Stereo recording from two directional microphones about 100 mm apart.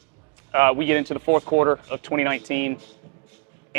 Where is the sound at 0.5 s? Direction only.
20° right (ahead or behind).